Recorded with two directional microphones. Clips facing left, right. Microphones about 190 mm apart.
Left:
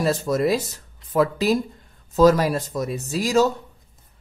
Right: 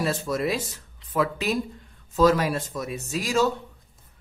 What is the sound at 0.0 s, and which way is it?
Speech, 40° left (ahead or behind).